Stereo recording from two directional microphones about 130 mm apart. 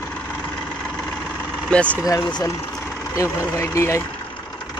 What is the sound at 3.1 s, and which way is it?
Speech, 25° left (ahead or behind).